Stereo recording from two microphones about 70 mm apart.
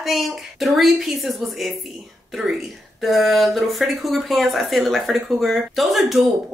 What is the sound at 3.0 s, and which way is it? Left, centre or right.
A man's voice, centre.